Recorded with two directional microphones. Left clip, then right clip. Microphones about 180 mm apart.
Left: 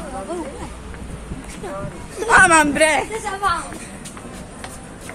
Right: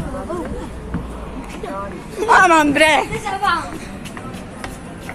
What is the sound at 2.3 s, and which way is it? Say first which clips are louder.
Speech: right 1 dB; 10° left (ahead or behind).